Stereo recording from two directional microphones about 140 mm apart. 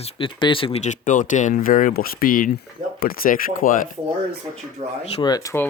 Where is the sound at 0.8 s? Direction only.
65° left (ahead or behind); by 3.8 s 80° left.